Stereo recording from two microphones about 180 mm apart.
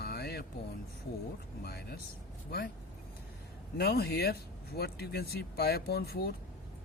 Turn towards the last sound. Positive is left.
turn(degrees=60)  # may be behind; listen again after turning